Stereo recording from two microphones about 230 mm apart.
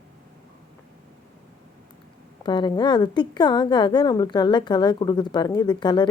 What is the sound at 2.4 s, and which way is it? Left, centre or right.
A woman's voice, centre.